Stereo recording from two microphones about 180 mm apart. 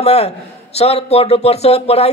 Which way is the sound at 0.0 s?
35° left (ahead or behind).